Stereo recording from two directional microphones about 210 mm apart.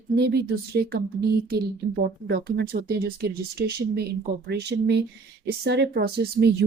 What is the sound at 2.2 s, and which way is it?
Speech, 50° right (ahead or behind).